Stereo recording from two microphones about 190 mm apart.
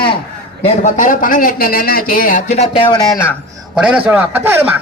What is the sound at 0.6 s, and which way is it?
Speech, 35° left (ahead or behind).